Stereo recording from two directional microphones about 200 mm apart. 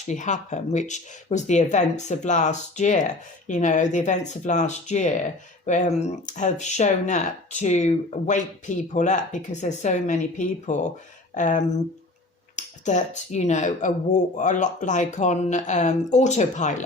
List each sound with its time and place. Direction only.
0.1 s speech: 35° left (ahead or behind)